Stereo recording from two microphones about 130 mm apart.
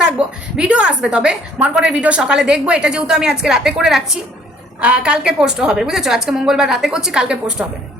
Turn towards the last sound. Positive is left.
turn(degrees=-5)  # may be behind; listen again after turning